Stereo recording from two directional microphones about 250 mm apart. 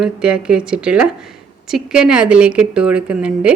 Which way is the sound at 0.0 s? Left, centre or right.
Centre.